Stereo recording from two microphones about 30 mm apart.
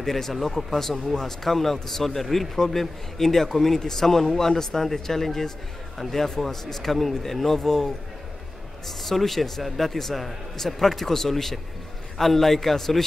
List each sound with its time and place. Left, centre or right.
0.0 s a man's voice: centre
2.5 s a man's voice: centre